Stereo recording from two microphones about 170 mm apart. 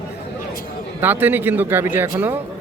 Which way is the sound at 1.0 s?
10° right (ahead or behind).